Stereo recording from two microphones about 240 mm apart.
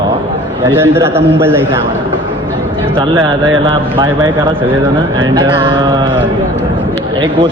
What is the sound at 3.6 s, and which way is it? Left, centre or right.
Speech, centre.